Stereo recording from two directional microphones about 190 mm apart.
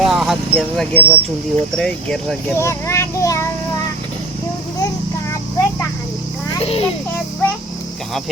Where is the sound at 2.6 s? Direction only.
15° left (ahead or behind).